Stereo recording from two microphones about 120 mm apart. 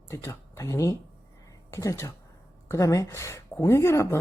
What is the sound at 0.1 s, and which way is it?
Speech, 25° left (ahead or behind).